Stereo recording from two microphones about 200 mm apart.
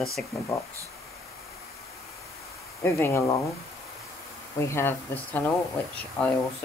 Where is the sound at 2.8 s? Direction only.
10° left (ahead or behind).